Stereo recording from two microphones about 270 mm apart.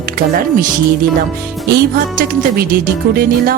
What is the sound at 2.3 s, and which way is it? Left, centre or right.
Speech, right.